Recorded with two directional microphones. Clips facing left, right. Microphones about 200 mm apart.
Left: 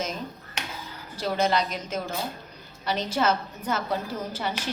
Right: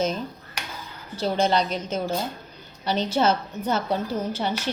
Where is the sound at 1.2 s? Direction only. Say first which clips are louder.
Right 3 dB; 30° right (ahead or behind).